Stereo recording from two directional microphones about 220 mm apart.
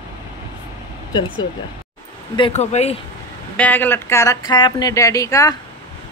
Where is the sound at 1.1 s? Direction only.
20° left (ahead or behind).